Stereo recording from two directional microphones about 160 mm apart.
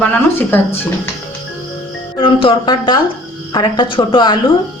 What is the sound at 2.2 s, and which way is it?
Speech, 35° left (ahead or behind).